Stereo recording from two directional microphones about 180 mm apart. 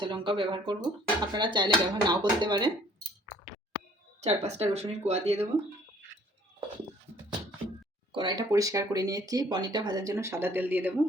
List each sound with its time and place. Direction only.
0.0 s speech: 30° right (ahead or behind)
4.2 s speech: 35° right (ahead or behind)
8.1 s speech: 25° right (ahead or behind); by 10.9 s 10° right (ahead or behind)